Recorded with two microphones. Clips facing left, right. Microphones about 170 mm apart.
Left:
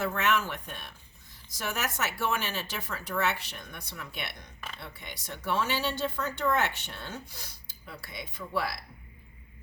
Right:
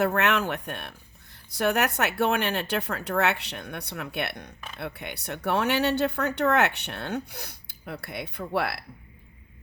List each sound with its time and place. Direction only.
0.0 s speech: 65° right (ahead or behind)